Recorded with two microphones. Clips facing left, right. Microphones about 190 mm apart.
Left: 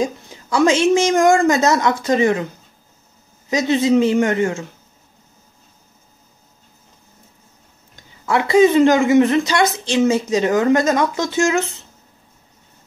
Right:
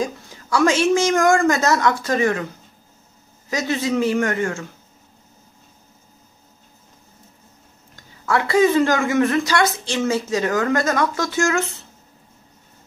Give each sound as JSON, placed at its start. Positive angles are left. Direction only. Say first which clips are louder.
{"t": 0.0, "sound": "a woman's voice", "louder": "left 3 dB", "side_deg": 20}
{"t": 3.4, "sound": "a woman's voice", "louder": "left 6 dB", "side_deg": 20}
{"t": 7.9, "sound": "a woman's voice", "louder": "left 2 dB", "side_deg": 20}